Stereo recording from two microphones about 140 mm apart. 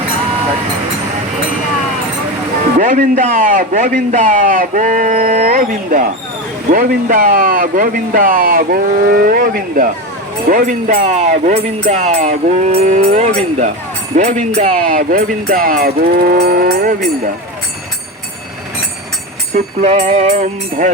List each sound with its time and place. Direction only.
2.7 s a man's voice: 75° right (ahead or behind)
10.5 s speech: 70° right (ahead or behind); by 16.9 s 90° right
19.5 s speech: 55° right (ahead or behind)